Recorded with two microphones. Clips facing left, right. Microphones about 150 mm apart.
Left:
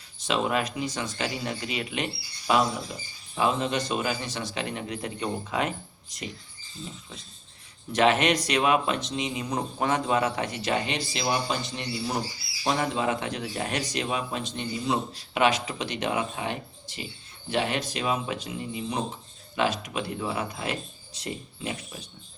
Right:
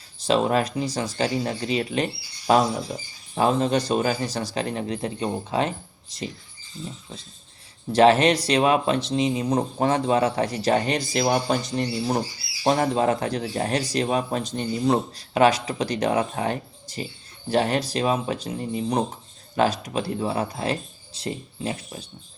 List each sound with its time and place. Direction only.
0.2 s speech: 35° right (ahead or behind)
7.9 s speech: 35° right (ahead or behind)